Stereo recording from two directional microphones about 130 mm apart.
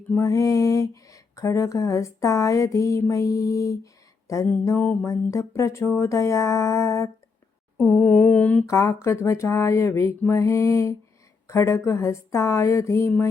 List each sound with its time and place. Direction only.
0.1 s speech: 25° left (ahead or behind)
7.9 s mantra: 15° left (ahead or behind)
8.6 s speech: 25° left (ahead or behind)